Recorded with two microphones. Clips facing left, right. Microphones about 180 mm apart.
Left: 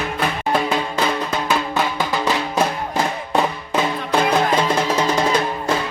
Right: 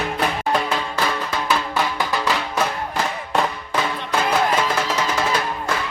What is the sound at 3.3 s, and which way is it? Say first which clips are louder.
Music: left 2 dB; 20° left (ahead or behind).